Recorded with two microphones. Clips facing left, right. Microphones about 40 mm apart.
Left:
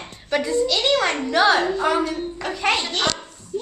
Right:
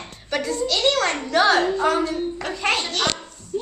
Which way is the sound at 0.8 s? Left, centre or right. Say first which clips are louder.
Left 1 dB; centre.